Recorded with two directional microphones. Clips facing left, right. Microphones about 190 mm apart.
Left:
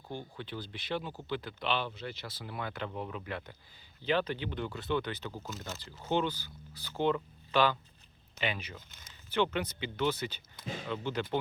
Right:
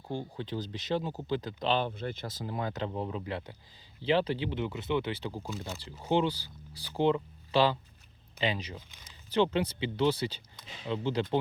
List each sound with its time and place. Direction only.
0.1 s speech: 30° right (ahead or behind)
5.3 s speech: 10° right (ahead or behind)
6.1 s speech: 30° right (ahead or behind)